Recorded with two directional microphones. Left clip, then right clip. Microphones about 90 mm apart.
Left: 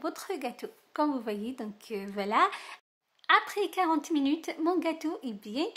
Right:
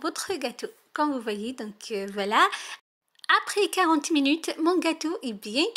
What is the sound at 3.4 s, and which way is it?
Speech, 45° right (ahead or behind).